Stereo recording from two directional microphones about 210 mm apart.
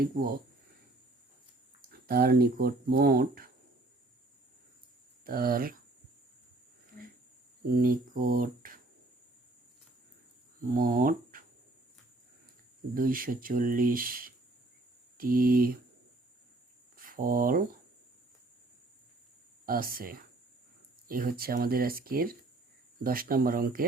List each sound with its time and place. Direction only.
1.9 s speech: 45° right (ahead or behind)
5.2 s speech: 45° right (ahead or behind)
7.8 s speech: 40° right (ahead or behind)
10.6 s speech: 45° right (ahead or behind)
12.9 s speech: 40° right (ahead or behind)
17.0 s speech: 45° right (ahead or behind)
19.6 s speech: 45° right (ahead or behind)